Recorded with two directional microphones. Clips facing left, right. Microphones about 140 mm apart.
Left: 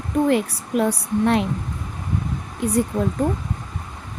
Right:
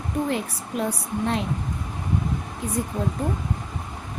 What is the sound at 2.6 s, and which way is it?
Speech, 70° left (ahead or behind).